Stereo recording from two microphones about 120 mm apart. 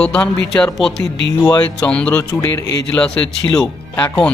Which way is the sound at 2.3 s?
25° left (ahead or behind).